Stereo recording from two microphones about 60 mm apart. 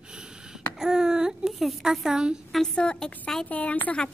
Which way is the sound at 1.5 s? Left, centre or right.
Centre.